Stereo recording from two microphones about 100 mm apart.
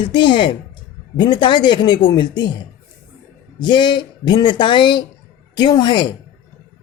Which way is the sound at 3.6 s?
50° left (ahead or behind).